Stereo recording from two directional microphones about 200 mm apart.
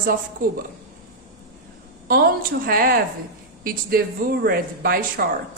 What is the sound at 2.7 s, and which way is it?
Speech, 45° right (ahead or behind).